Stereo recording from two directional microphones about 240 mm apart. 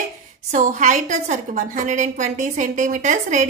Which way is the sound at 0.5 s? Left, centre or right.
Right.